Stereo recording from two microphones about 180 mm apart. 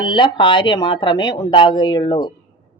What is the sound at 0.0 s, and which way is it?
A woman's voice, 25° left (ahead or behind).